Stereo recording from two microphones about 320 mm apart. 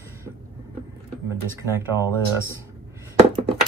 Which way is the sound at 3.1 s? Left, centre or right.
Centre.